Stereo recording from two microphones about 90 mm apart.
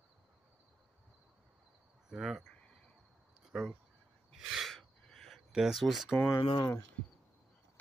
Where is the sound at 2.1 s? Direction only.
Centre (ahead or behind).